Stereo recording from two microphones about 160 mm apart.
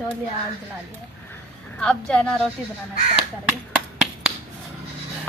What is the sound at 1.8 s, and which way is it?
Speech, 5° left (ahead or behind).